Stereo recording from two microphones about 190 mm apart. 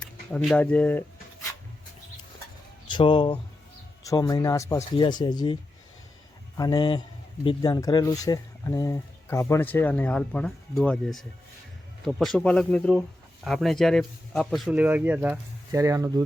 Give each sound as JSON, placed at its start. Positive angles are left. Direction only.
{"t": 0.3, "sound": "speech", "side_deg": 5}
{"t": 2.8, "sound": "speech", "side_deg": 25}
{"t": 6.6, "sound": "speech", "side_deg": 25}